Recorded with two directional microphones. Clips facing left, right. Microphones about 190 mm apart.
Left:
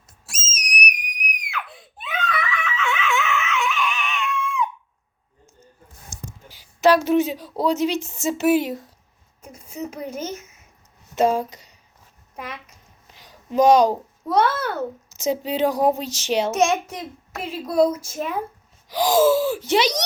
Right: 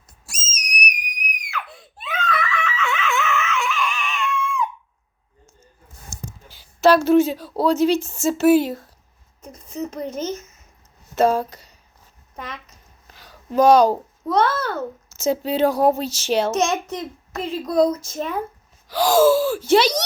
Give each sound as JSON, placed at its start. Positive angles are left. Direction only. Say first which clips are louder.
{"t": 0.3, "sound": "whistle", "louder": "left 1 dB", "side_deg": 0}
{"t": 1.4, "sound": "screaming", "louder": "right 2 dB", "side_deg": 0}
{"t": 6.5, "sound": "a woman's voice", "louder": "right 1 dB", "side_deg": 15}
{"t": 12.4, "sound": "a sound", "louder": "even", "side_deg": 10}
{"t": 14.3, "sound": "a woman's voice", "louder": "even", "side_deg": 10}